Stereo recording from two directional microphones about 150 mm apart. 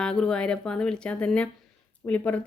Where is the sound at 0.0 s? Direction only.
5° left (ahead or behind).